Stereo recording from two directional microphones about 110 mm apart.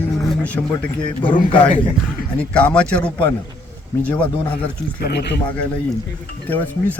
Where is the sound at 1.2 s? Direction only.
50° left (ahead or behind).